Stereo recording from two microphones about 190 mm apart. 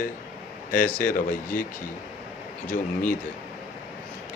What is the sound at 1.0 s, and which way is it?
Speech, 45° left (ahead or behind).